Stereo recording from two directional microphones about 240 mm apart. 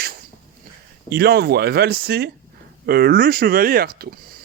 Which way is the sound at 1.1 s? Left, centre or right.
Right.